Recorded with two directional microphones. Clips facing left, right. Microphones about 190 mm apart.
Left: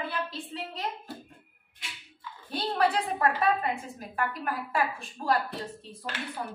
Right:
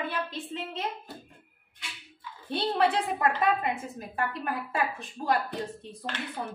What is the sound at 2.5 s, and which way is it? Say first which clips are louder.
A woman's voice: right 1 dB; 25° right (ahead or behind).